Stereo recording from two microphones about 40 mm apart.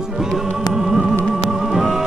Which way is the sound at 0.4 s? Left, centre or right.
Centre.